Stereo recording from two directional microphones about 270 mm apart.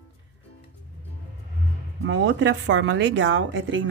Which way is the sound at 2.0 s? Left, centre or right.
Right.